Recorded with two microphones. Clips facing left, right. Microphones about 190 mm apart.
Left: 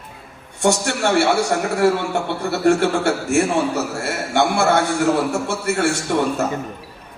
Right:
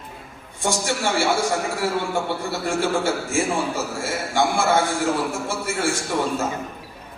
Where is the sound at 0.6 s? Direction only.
70° left (ahead or behind).